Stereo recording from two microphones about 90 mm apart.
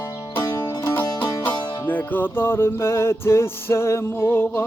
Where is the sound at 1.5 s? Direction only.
20° left (ahead or behind).